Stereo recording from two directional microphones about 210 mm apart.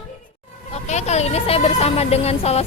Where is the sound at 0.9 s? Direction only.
30° left (ahead or behind).